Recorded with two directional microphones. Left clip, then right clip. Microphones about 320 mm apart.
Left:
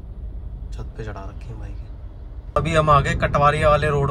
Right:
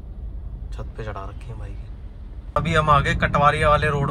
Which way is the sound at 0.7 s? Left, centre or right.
Centre.